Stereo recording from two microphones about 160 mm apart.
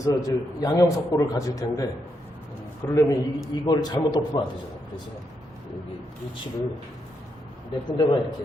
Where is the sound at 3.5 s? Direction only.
25° left (ahead or behind).